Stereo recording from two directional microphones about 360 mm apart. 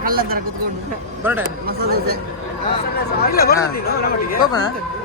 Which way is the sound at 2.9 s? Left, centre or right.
Left.